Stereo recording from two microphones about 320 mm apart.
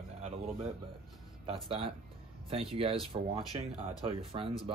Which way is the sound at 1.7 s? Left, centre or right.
Centre.